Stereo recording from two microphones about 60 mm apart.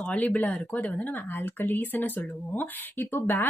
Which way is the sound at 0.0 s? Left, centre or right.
Left.